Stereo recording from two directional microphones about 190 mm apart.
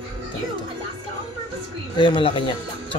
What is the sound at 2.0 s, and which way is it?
Speech, 25° left (ahead or behind).